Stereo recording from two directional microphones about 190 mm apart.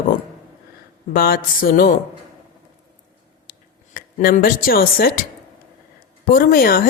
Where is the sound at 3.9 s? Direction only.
50° left (ahead or behind).